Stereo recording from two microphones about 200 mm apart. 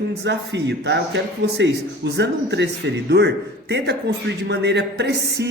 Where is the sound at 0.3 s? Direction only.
60° right (ahead or behind).